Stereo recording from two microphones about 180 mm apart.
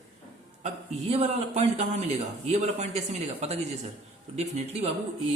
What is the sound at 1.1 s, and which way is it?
A man's voice, 35° right (ahead or behind).